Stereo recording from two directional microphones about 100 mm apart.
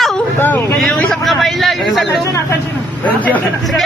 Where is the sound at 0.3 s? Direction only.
15° left (ahead or behind).